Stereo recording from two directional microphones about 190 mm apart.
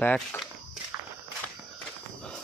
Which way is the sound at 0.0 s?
10° left (ahead or behind).